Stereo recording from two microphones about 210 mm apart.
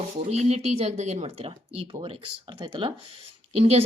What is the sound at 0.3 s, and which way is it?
Speech, 30° right (ahead or behind).